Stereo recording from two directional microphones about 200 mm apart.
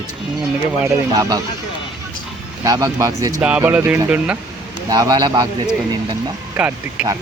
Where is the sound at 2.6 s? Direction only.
15° right (ahead or behind).